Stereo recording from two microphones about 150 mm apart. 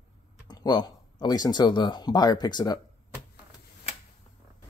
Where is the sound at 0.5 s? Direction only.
30° left (ahead or behind).